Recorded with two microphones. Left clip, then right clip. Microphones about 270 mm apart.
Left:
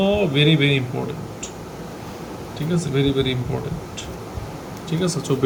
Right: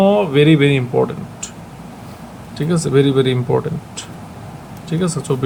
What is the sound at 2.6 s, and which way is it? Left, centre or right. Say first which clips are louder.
Speech: right 8 dB; centre.